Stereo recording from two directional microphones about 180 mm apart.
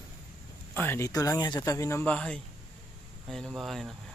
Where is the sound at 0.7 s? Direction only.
10° left (ahead or behind).